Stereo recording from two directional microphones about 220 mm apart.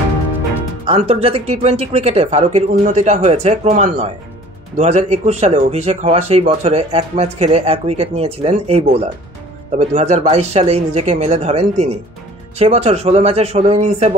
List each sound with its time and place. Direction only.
0.8 s speech: 25° right (ahead or behind)